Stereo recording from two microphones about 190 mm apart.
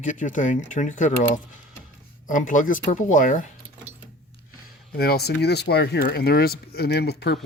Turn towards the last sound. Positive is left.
turn(degrees=60)  # may be behind; listen again after turning